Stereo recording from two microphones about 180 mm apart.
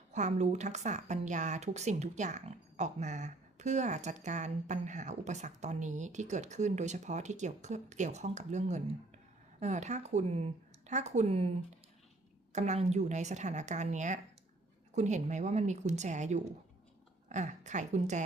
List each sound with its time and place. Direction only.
0.1 s a woman's voice: 40° right (ahead or behind)
12.5 s a woman's voice: 40° right (ahead or behind)